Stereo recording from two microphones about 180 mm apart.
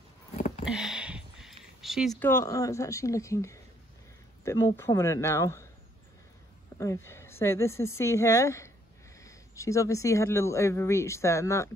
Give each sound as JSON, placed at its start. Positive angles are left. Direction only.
{"t": 0.7, "sound": "a sound", "side_deg": -5}
{"t": 2.1, "sound": "speech", "side_deg": 15}
{"t": 6.8, "sound": "speech", "side_deg": 15}